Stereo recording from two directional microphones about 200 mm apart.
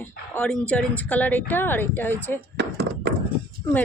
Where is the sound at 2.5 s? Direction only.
55° right (ahead or behind).